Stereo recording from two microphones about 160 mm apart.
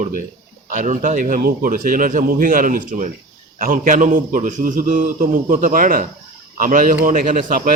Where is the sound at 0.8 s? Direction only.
55° right (ahead or behind).